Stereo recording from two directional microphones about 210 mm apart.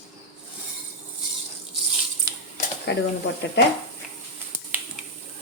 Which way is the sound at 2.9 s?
50° left (ahead or behind).